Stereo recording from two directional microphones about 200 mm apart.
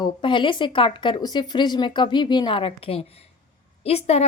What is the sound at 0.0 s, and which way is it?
Speech, 25° left (ahead or behind).